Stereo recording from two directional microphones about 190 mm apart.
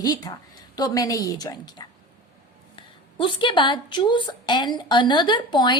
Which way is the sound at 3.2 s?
25° left (ahead or behind).